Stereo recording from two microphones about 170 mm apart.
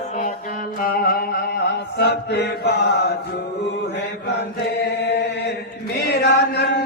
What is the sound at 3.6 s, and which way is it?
Mantra, 90° left.